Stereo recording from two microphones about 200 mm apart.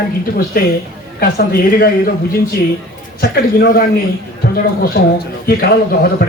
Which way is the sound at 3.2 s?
50° left (ahead or behind).